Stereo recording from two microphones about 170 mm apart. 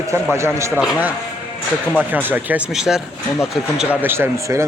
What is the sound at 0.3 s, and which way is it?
Speech, 15° right (ahead or behind).